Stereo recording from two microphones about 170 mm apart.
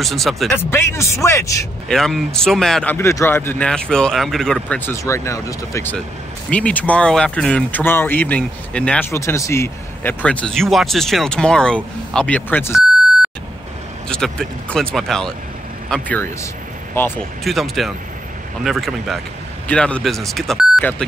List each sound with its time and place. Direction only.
0.0 s speech: centre (ahead or behind)
0.5 s speech: 15° left (ahead or behind)
1.9 s speech: centre (ahead or behind)
14.0 s speech: 5° left (ahead or behind)
17.4 s speech: centre (ahead or behind)